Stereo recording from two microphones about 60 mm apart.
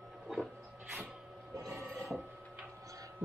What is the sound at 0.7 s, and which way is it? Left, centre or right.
Printer, right.